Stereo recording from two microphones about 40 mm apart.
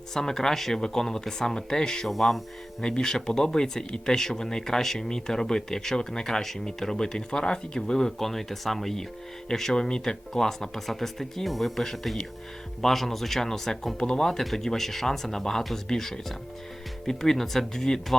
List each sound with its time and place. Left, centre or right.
0.1 s speech: centre
2.0 s speech: centre
2.8 s speech: centre